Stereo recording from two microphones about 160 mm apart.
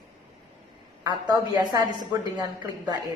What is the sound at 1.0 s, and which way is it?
A woman's voice, 25° right (ahead or behind).